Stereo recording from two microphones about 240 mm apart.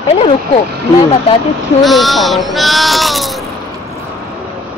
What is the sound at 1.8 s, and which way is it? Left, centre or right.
Speech, centre.